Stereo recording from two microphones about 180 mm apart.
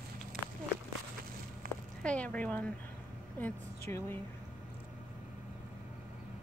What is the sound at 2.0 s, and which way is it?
A woman's voice, 5° left (ahead or behind).